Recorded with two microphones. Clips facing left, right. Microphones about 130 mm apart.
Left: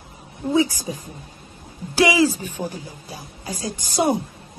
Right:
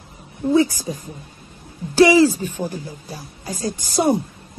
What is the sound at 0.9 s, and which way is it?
Speech, 40° right (ahead or behind).